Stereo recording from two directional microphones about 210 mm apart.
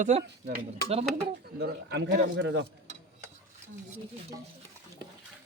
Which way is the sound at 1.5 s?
55° right (ahead or behind).